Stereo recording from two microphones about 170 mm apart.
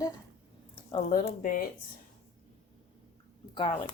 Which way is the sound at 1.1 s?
50° left (ahead or behind).